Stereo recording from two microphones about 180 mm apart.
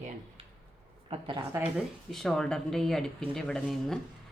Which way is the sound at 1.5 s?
10° right (ahead or behind).